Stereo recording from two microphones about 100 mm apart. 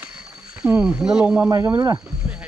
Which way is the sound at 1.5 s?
30° right (ahead or behind).